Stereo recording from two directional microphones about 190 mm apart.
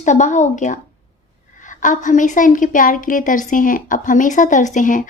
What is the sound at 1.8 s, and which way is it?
A woman's voice, 40° left (ahead or behind).